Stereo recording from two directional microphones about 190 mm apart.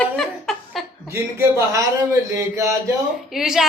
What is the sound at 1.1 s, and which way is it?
Speech, 15° right (ahead or behind).